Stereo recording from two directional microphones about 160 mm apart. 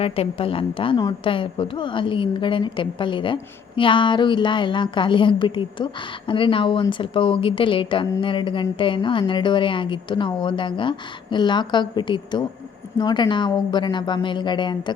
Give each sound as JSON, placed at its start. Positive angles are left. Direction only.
{"t": 0.0, "sound": "a woman's voice", "side_deg": 35}